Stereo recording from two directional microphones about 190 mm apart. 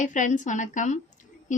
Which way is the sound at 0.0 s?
40° left (ahead or behind).